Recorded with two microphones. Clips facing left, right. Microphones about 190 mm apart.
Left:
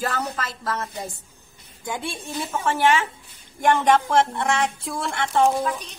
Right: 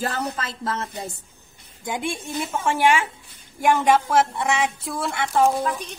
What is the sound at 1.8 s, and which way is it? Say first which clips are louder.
A woman's voice: right 3 dB; 15° right (ahead or behind).